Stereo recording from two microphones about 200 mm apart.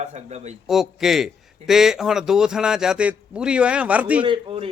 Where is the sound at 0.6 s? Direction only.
Centre (ahead or behind).